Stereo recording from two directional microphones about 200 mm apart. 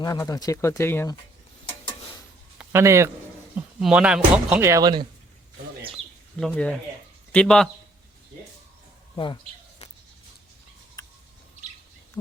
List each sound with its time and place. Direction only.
0.0 s speech: 20° left (ahead or behind)
2.6 s speech: 15° right (ahead or behind)
6.4 s speech: 5° left (ahead or behind)
9.1 s a sound: 25° left (ahead or behind)